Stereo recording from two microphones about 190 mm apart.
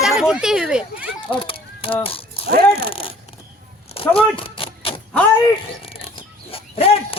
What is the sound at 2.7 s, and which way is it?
Speech, 30° left (ahead or behind).